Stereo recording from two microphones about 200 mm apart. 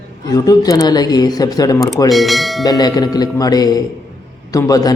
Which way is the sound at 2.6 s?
20° left (ahead or behind).